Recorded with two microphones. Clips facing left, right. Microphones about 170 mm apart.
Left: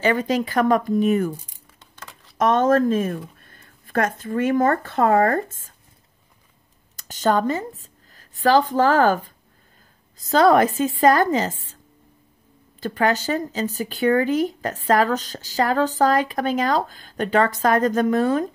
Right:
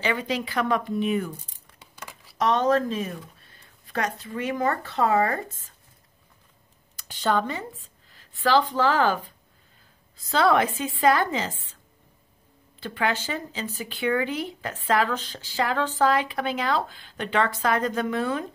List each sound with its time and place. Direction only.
0.0 s speech: 45° left (ahead or behind)
1.8 s a sound: 10° right (ahead or behind)
2.3 s speech: 50° left (ahead or behind)
7.0 s speech: 45° left (ahead or behind)
12.8 s speech: 40° left (ahead or behind)